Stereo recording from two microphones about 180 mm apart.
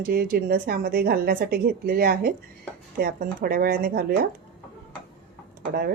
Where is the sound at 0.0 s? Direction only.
55° right (ahead or behind).